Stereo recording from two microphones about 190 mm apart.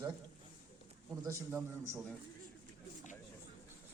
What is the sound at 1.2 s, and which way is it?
Speech, 15° right (ahead or behind).